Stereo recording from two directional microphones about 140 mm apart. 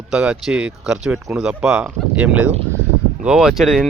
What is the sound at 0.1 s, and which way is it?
Speech, 5° right (ahead or behind).